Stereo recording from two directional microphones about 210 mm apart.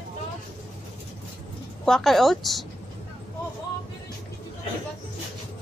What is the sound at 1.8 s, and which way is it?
Speech, centre (ahead or behind).